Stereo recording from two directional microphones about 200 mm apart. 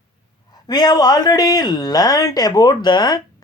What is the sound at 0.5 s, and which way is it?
Speech, 20° left (ahead or behind).